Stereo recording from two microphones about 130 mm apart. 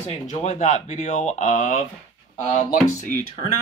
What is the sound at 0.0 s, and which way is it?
Speech, 60° left (ahead or behind).